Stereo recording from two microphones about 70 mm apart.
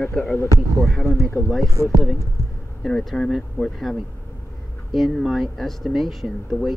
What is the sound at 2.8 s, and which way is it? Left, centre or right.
Speech, centre.